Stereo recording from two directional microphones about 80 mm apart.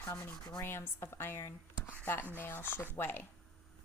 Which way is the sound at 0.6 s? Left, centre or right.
Left.